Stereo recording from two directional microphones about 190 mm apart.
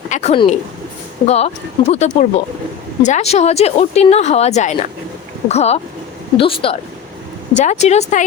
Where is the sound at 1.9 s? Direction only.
35° left (ahead or behind).